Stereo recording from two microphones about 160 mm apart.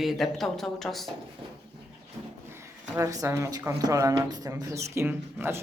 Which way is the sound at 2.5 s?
15° right (ahead or behind).